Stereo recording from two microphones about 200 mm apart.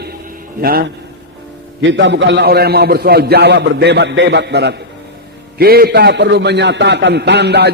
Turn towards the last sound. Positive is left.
turn(degrees=-55)  # may be behind; listen again after turning